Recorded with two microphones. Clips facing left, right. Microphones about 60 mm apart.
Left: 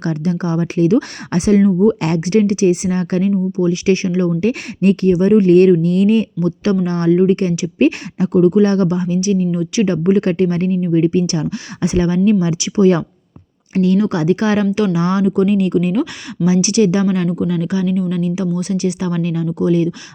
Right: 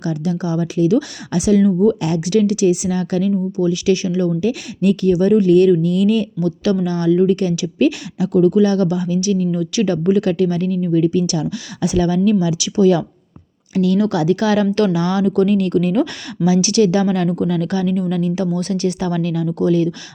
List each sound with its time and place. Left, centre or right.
0.0 s speech: left
2.0 s speech: left
2.2 s speech: left
17.2 s speech: centre